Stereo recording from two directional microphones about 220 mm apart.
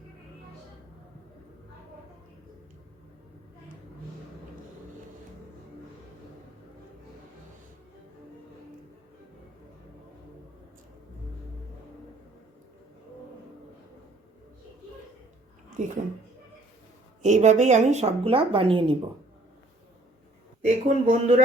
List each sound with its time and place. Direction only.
15.8 s speech: 35° right (ahead or behind)
17.2 s a woman's voice: 35° right (ahead or behind)
20.7 s speech: 35° right (ahead or behind)